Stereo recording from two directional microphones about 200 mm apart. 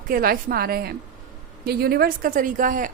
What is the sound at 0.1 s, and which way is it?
A woman's voice, 45° right (ahead or behind).